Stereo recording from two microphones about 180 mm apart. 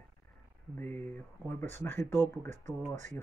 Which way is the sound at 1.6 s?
10° left (ahead or behind).